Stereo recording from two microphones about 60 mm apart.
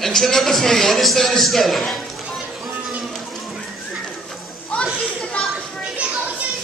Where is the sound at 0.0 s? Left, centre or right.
Centre.